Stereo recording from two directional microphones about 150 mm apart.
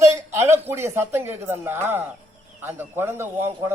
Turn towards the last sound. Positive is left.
turn(degrees=-15)  # may be behind; listen again after turning